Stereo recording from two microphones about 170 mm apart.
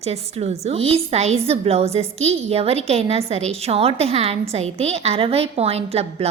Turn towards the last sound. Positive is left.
turn(degrees=-35)  # may be behind; listen again after turning